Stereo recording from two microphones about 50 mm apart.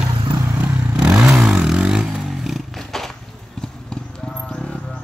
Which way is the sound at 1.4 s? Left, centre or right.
Centre.